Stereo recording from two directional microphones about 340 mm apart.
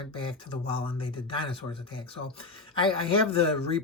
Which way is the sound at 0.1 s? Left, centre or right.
Centre.